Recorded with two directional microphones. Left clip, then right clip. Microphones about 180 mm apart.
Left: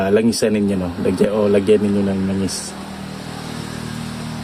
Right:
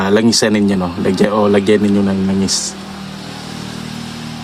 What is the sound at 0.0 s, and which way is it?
Speech, 60° right (ahead or behind).